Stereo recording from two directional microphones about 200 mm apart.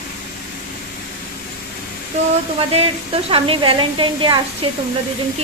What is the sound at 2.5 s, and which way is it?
A woman's voice, 30° right (ahead or behind).